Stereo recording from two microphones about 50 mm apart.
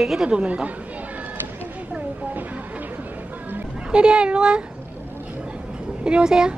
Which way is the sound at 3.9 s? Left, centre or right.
Centre.